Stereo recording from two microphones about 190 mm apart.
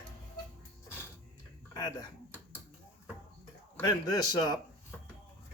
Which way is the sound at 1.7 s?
20° left (ahead or behind).